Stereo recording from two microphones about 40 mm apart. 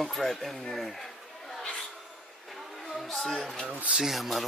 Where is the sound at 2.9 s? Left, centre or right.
Centre.